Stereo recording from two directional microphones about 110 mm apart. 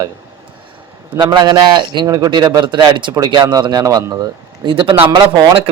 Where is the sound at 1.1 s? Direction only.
45° right (ahead or behind).